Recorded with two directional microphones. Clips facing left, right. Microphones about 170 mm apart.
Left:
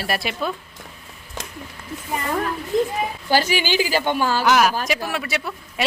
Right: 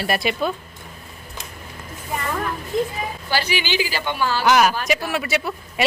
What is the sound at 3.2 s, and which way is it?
Speech, 45° left (ahead or behind).